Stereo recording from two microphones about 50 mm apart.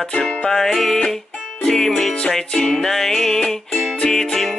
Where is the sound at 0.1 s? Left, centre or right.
Centre.